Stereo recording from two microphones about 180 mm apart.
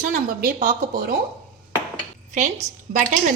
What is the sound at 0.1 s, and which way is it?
A woman's voice, 50° right (ahead or behind).